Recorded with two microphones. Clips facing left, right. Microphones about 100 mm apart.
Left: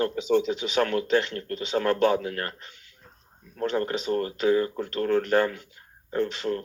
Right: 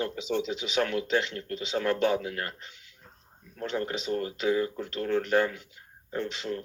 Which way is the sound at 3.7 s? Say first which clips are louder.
Left 4 dB; 45° left (ahead or behind).